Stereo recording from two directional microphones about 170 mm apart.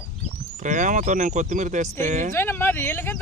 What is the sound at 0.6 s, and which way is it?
Speech, 45° right (ahead or behind).